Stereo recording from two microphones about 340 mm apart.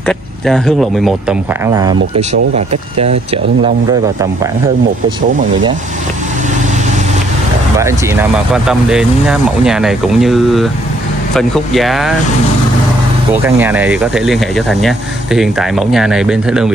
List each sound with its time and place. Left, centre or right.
0.0 s speech: centre
2.0 s speech: right
2.5 s speech: centre
7.8 s speech: centre
13.3 s speech: centre